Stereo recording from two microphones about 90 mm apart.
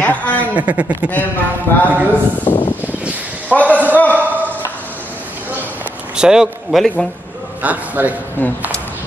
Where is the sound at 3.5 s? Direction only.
15° left (ahead or behind).